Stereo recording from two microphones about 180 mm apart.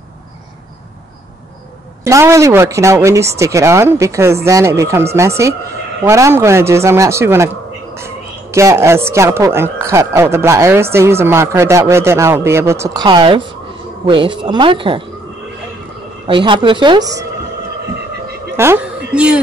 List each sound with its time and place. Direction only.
2.0 s speech: 15° right (ahead or behind)
16.3 s speech: 25° right (ahead or behind)
18.6 s a woman's voice: 10° right (ahead or behind)